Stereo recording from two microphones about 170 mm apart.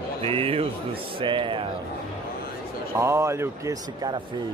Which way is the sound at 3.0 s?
15° right (ahead or behind).